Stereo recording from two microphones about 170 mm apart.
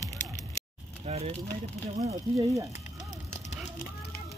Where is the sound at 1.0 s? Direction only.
40° right (ahead or behind).